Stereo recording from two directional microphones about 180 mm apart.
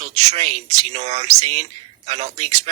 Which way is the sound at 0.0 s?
40° right (ahead or behind).